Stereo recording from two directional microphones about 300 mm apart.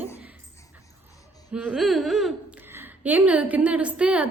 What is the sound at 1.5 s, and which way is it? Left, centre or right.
Speech, centre.